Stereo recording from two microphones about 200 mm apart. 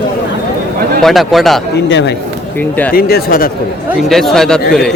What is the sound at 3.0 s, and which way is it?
Speech, 50° left (ahead or behind).